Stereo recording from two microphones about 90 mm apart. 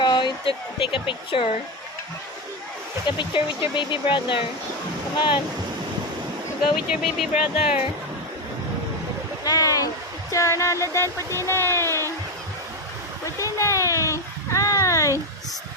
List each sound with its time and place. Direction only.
0.0 s speech: 55° left (ahead or behind); by 1.5 s 75° left (ahead or behind)
3.1 s speech: 65° left (ahead or behind)
6.6 s speech: 5° right (ahead or behind)
9.4 s a sound: 40° left (ahead or behind)
10.3 s speech: 35° left (ahead or behind)
13.4 s a sound: 35° left (ahead or behind)